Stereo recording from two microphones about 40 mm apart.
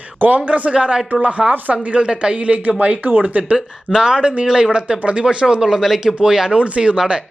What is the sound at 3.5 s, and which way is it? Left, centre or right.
Speech, centre.